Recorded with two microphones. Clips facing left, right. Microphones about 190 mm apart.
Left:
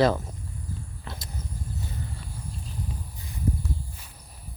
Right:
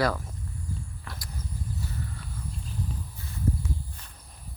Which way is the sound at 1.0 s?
25° left (ahead or behind).